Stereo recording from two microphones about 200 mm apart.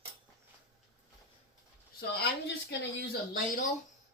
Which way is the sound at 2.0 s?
50° left (ahead or behind).